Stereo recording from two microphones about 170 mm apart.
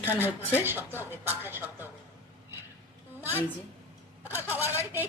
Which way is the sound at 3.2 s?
10° right (ahead or behind).